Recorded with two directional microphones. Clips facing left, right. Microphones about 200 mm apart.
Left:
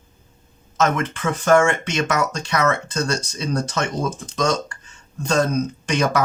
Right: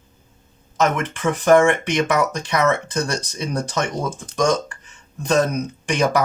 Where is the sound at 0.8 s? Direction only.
15° right (ahead or behind).